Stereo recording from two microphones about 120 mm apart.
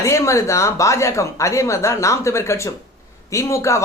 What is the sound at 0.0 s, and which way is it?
Speech, 25° left (ahead or behind).